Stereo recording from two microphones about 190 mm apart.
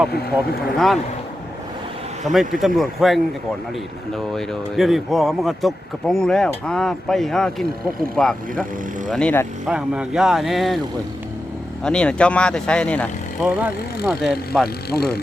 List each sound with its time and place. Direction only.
0.1 s speech: 55° left (ahead or behind)
2.2 s speech: centre (ahead or behind)
9.6 s speech: 5° right (ahead or behind)
11.8 s speech: 5° left (ahead or behind)
14.8 s speech: 55° left (ahead or behind)